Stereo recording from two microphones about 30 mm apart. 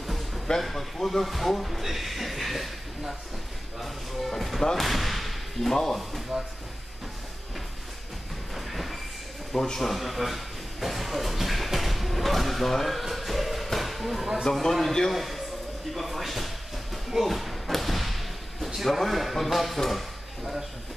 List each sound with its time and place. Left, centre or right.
0.0 s music: centre
0.6 s speech: centre
4.3 s speech: centre
6.3 s speech: right
8.5 s train: centre
9.5 s speech: centre
9.8 s a sound: centre
14.4 s a man's voice: centre
15.9 s slam: centre
18.8 s speech: centre